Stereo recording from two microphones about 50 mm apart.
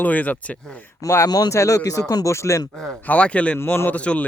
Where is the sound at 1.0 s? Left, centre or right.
Left.